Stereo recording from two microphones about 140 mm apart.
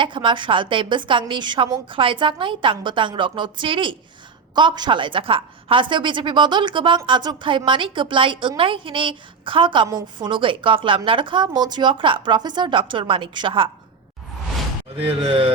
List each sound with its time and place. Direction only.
0.0 s a woman's voice: 35° right (ahead or behind)
14.9 s a woman's voice: 40° right (ahead or behind)